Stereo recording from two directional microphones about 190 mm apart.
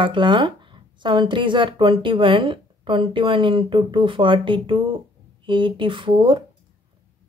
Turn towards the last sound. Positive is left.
turn(degrees=-25)  # may be behind; listen again after turning